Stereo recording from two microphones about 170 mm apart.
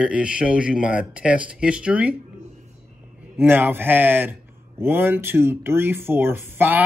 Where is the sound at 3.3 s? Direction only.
10° right (ahead or behind).